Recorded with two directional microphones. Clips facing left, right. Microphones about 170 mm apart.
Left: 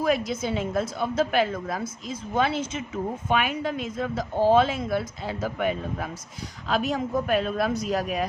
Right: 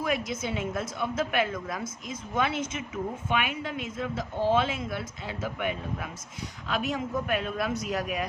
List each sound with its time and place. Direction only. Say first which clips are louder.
0.0 s a woman's voice: left 5 dB; 35° left (ahead or behind)